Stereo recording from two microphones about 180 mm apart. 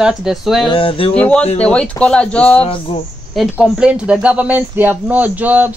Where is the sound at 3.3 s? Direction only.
5° right (ahead or behind).